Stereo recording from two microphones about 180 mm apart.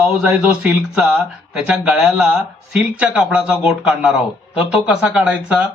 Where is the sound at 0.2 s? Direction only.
5° right (ahead or behind).